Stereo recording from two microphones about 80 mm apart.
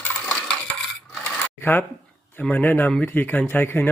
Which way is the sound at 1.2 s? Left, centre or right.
Left.